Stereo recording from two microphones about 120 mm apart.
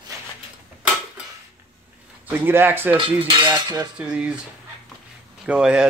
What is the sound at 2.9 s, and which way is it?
Cutlery, 40° right (ahead or behind).